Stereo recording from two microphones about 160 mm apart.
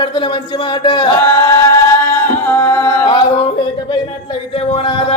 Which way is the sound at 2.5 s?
15° left (ahead or behind).